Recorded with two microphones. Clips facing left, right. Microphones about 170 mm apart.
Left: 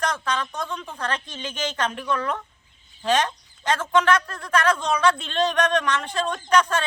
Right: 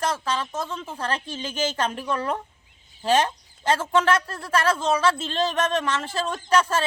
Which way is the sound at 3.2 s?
30° right (ahead or behind).